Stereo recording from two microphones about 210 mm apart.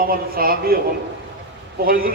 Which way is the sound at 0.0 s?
45° right (ahead or behind).